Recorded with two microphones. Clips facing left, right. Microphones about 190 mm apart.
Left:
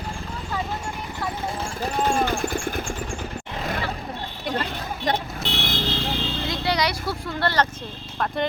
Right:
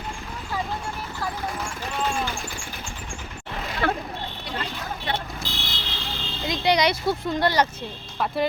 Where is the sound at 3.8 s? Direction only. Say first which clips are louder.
Right 6 dB; 60° right (ahead or behind).